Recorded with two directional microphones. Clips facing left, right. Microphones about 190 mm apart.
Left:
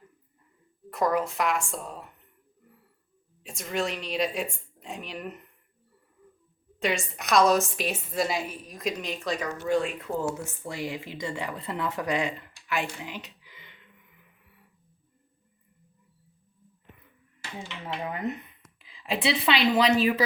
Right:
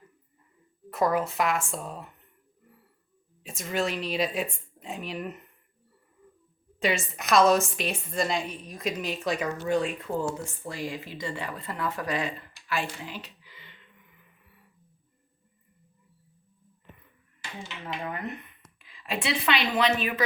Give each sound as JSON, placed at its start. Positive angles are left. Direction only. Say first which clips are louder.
{"t": 0.9, "sound": "a woman's voice", "louder": "even", "side_deg": 0}
{"t": 3.4, "sound": "a woman's voice", "louder": "right 1 dB", "side_deg": 0}
{"t": 6.7, "sound": "a woman's voice", "louder": "right 1 dB", "side_deg": 0}
{"t": 10.2, "sound": "speech", "louder": "left 1 dB", "side_deg": 10}
{"t": 17.8, "sound": "a woman's voice", "louder": "left 3 dB", "side_deg": 15}